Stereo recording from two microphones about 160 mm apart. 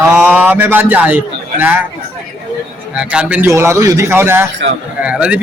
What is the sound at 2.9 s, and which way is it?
A man's voice, 5° right (ahead or behind).